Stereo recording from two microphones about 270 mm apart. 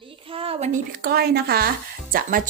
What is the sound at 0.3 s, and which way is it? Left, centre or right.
Speech, right.